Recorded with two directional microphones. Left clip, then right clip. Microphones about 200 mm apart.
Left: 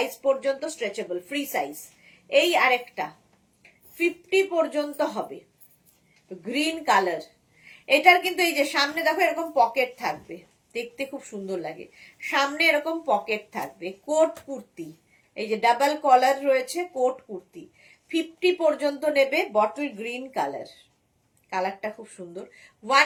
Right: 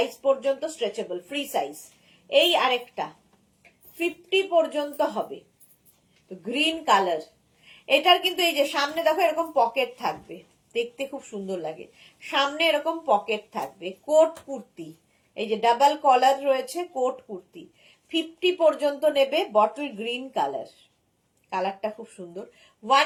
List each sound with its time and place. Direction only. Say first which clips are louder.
0.0 s a woman's voice: right 1 dB; 20° left (ahead or behind)
6.4 s a woman's voice: right 1 dB; 15° left (ahead or behind)
15.4 s speech: right 1 dB; 20° left (ahead or behind)
18.1 s speech: left 1 dB; 15° left (ahead or behind)